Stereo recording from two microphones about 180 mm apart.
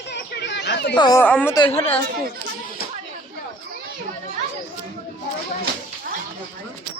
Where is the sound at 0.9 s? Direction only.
25° left (ahead or behind).